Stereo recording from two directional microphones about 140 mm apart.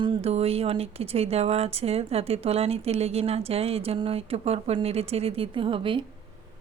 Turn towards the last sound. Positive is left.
turn(degrees=-35)  # may be behind; listen again after turning